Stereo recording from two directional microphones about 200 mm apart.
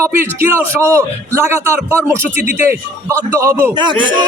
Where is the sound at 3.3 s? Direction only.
10° right (ahead or behind).